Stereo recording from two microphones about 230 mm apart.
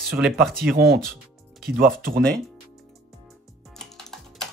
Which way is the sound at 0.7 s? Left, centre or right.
Right.